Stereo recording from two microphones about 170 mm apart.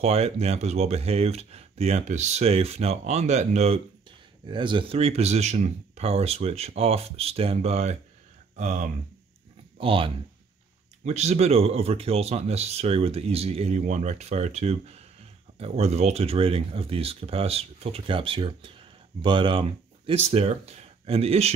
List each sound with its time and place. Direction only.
0.0 s speech: 35° right (ahead or behind)
4.5 s speech: 30° right (ahead or behind); by 8.9 s 45° right (ahead or behind)
9.8 s speech: 30° right (ahead or behind)